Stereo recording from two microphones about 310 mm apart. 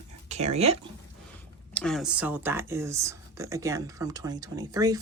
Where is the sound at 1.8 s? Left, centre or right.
Centre.